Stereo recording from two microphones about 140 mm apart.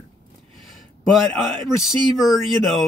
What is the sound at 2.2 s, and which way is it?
Speech, centre (ahead or behind).